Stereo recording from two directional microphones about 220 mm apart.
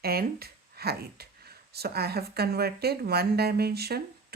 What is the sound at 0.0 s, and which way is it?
Speech, 45° right (ahead or behind).